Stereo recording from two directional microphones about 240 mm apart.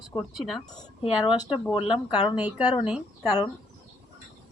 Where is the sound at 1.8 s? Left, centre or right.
Left.